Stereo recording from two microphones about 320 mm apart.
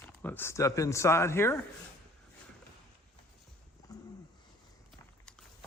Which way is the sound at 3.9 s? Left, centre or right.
Centre.